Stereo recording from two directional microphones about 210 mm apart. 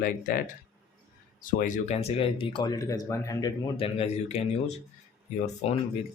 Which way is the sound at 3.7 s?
30° left (ahead or behind).